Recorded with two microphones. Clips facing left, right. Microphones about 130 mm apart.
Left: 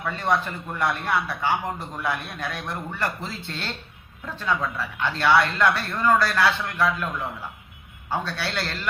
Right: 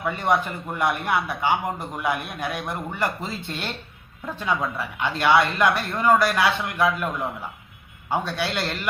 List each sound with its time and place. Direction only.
0.0 s a man's voice: 15° right (ahead or behind)